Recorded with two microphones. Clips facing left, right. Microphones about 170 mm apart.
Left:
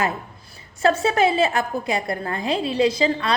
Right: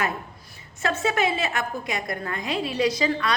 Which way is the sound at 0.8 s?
30° left (ahead or behind).